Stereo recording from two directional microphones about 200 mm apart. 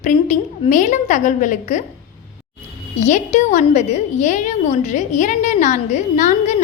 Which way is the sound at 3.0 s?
35° left (ahead or behind).